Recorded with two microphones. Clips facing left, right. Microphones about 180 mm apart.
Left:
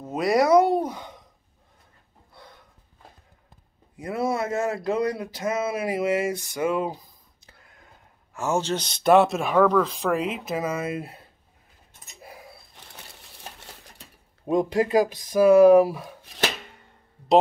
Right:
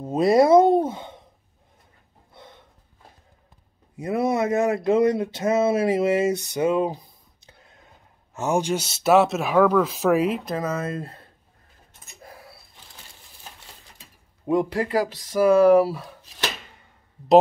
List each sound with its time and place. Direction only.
0.0 s a sound: 30° right (ahead or behind)
2.3 s snort: 20° right (ahead or behind)
3.9 s speech: 20° right (ahead or behind); by 11.2 s 10° left (ahead or behind)
12.2 s a sound: 15° left (ahead or behind)
12.9 s sewing machine: 70° left (ahead or behind)
14.4 s speech: 20° left (ahead or behind)